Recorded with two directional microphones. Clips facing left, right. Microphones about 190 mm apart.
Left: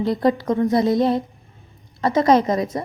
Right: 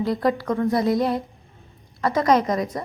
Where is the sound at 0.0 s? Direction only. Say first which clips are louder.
Left 3 dB; 25° left (ahead or behind).